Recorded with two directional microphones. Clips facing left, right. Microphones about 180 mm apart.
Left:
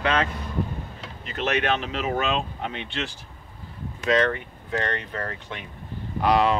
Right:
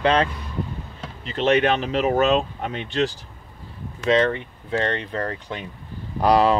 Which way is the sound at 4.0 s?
25° right (ahead or behind).